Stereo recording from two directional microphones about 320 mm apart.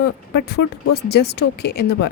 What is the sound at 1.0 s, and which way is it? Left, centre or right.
Speech, left.